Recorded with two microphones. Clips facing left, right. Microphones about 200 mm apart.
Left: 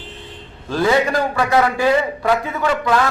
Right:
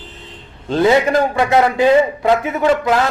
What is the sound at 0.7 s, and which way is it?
A man's voice, 20° right (ahead or behind).